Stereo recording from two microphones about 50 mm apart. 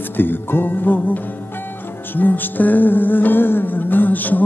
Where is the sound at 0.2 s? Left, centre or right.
Left.